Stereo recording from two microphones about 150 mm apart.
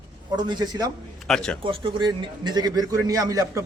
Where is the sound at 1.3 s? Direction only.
Centre (ahead or behind).